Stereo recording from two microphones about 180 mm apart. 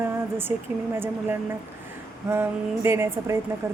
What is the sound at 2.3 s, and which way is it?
Speech, 15° right (ahead or behind).